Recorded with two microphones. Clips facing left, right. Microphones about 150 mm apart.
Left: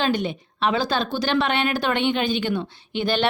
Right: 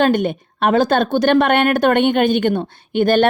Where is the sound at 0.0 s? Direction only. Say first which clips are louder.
Right 7 dB; 50° right (ahead or behind).